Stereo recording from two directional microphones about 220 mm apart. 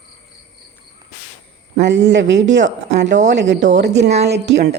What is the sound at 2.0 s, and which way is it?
Speech, 55° right (ahead or behind).